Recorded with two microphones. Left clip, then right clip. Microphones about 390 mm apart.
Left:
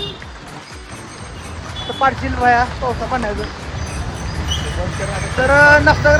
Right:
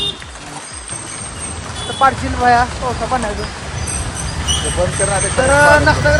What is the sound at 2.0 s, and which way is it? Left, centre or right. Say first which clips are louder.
Speech: right 2 dB; centre.